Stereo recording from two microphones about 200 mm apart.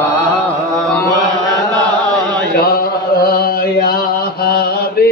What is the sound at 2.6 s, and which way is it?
Mantra, 50° left (ahead or behind).